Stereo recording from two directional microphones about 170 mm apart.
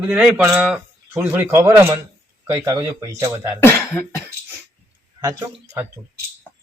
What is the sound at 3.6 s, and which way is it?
Cough, 10° left (ahead or behind).